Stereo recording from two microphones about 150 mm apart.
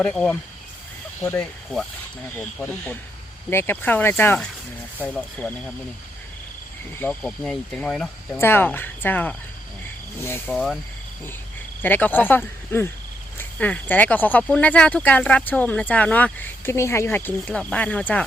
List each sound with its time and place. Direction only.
0.0 s speech: 10° left (ahead or behind)
7.0 s speech: 10° left (ahead or behind)
8.4 s speech: 15° left (ahead or behind)
10.5 s speech: centre (ahead or behind)
11.8 s speech: 10° left (ahead or behind)